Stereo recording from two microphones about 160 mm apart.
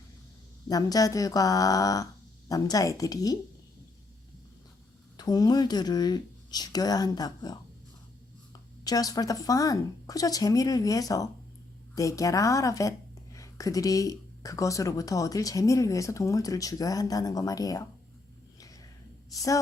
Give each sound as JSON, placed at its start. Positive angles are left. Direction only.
{"t": 0.7, "sound": "speech", "side_deg": 20}
{"t": 5.1, "sound": "speech", "side_deg": 25}
{"t": 18.6, "sound": "a sound", "side_deg": 20}